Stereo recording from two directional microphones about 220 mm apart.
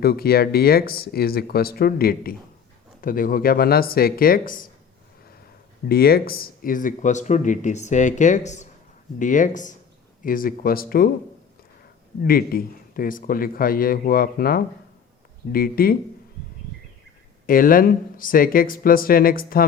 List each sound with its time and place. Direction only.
0.0 s speech: 45° left (ahead or behind)
5.9 s speech: 45° left (ahead or behind)
12.2 s speech: 45° left (ahead or behind)
17.4 s speech: 40° left (ahead or behind)